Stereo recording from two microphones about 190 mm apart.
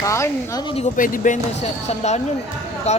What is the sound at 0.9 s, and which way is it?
Speech, 45° left (ahead or behind).